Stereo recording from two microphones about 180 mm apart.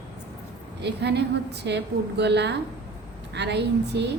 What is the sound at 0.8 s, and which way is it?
A woman's voice, 70° right (ahead or behind).